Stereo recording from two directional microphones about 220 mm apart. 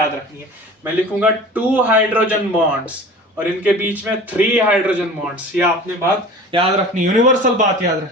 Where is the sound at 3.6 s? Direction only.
5° right (ahead or behind).